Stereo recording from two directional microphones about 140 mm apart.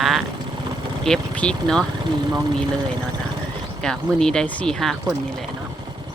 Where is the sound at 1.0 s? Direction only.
5° left (ahead or behind).